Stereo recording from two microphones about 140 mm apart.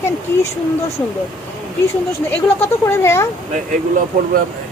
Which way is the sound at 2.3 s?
15° left (ahead or behind).